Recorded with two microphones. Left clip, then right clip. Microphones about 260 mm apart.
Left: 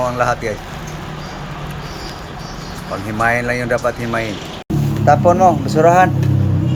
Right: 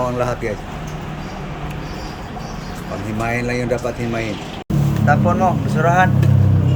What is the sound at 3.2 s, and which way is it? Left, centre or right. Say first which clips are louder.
Speech: left 4 dB; centre.